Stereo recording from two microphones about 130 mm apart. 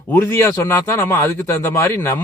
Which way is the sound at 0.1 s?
20° left (ahead or behind).